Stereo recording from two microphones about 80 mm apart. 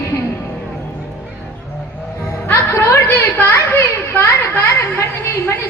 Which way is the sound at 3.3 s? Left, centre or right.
Left.